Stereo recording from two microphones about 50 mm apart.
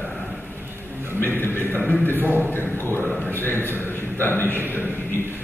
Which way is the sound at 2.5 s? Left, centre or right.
Left.